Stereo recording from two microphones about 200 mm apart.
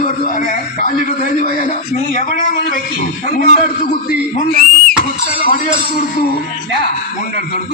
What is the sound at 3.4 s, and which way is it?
A man's voice, 40° left (ahead or behind).